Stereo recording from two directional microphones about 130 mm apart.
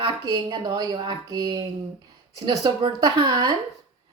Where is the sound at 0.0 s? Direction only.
35° right (ahead or behind).